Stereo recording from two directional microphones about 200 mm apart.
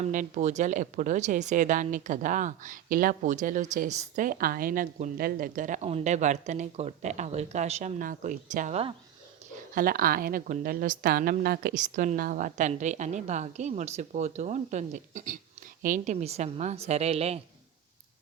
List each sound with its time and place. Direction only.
0.0 s speech: 40° right (ahead or behind)
9.7 s speech: 45° right (ahead or behind)